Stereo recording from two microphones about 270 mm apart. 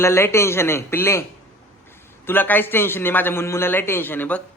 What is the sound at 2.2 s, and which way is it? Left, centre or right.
A man's voice, centre.